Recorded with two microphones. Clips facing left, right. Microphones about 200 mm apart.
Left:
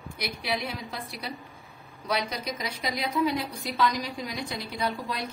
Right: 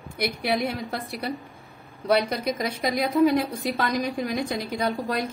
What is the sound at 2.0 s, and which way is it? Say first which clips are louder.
Speech: right 8 dB; 55° right (ahead or behind).